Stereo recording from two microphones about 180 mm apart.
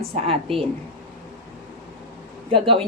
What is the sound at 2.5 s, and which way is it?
Speech, 30° right (ahead or behind).